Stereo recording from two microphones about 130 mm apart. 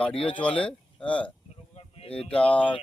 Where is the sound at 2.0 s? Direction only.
50° left (ahead or behind).